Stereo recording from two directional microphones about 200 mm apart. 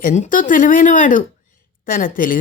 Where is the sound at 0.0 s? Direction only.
40° left (ahead or behind).